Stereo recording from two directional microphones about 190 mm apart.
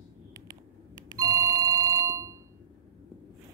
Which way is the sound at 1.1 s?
20° right (ahead or behind).